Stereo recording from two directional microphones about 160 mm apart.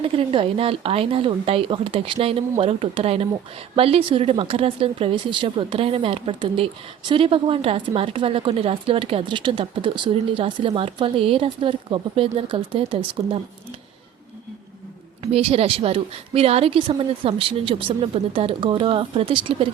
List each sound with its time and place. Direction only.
0.0 s speech: 35° right (ahead or behind)
15.2 s speech: 40° right (ahead or behind)